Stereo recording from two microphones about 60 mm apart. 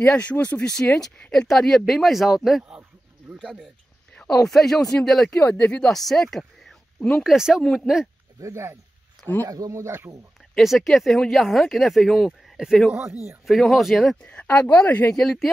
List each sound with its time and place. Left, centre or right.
0.0 s speech: centre
4.3 s speech: centre
5.5 s speech: centre
7.0 s speech: centre
7.2 s speech: centre
8.4 s speech: right
9.2 s a sound: centre
9.7 s speech: right
10.6 s speech: centre
13.5 s speech: centre
14.2 s a woman's voice: centre
15.1 s speech: centre